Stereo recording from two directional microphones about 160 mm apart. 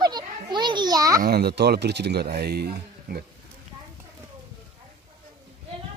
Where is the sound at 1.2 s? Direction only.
80° right.